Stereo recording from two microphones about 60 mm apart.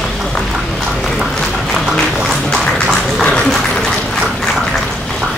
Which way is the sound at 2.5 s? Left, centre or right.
Centre.